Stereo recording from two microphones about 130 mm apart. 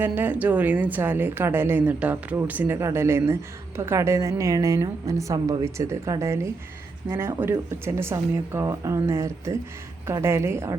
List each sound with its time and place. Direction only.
0.0 s a woman's voice: 15° right (ahead or behind)